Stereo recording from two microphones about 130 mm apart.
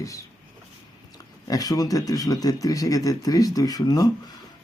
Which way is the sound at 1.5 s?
30° left (ahead or behind).